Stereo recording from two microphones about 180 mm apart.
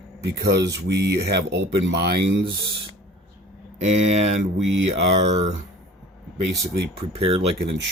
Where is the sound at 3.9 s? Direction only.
35° right (ahead or behind).